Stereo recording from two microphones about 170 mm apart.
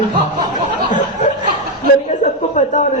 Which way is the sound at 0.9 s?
45° left (ahead or behind).